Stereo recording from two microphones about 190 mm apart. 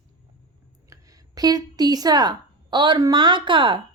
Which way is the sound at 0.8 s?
20° right (ahead or behind).